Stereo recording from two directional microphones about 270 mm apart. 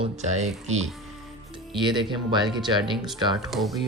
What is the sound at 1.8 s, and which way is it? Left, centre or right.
Speech, centre.